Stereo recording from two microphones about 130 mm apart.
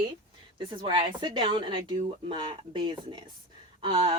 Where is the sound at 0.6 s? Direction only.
45° right (ahead or behind).